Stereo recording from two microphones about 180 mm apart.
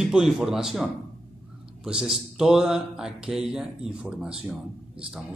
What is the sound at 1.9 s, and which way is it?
Speech, 5° right (ahead or behind).